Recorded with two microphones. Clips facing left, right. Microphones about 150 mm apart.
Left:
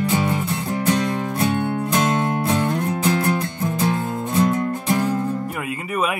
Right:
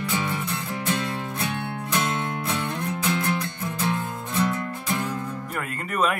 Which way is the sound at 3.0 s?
35° left (ahead or behind).